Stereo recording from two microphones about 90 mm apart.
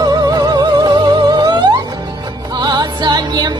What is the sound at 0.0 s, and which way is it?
Music, 45° right (ahead or behind).